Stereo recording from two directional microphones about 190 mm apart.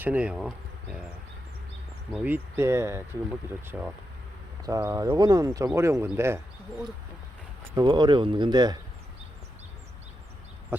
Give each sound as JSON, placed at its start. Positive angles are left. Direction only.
{"t": 0.0, "sound": "speech", "side_deg": -5}
{"t": 2.2, "sound": "speech", "side_deg": -10}